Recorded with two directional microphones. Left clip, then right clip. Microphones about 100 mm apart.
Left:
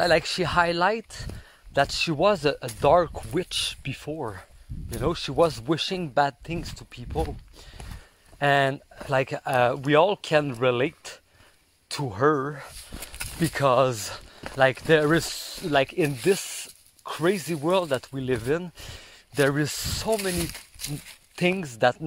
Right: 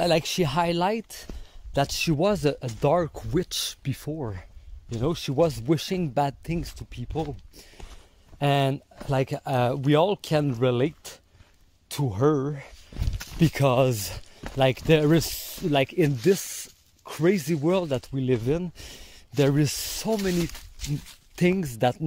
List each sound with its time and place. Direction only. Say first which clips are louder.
0.2 s speech: left 2 dB; 40° right (ahead or behind)
2.8 s speech: left 4 dB; 15° right (ahead or behind)
3.1 s speech: right 1 dB; 35° right (ahead or behind)
8.4 s speech: left 3 dB; 40° right (ahead or behind)
13.7 s speech: left 3 dB; 45° right (ahead or behind)
15.2 s speech: right 1 dB; 40° right (ahead or behind)
19.5 s speech: right 1 dB; 55° right (ahead or behind)
21.5 s speech: left 2 dB; 40° right (ahead or behind)